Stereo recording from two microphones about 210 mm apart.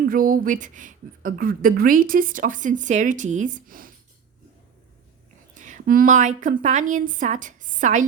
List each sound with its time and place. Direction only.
0.0 s speech: 40° right (ahead or behind)
5.5 s speech: 35° right (ahead or behind)